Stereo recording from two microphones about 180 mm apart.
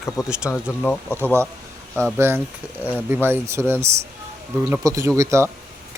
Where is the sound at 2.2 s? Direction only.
15° right (ahead or behind).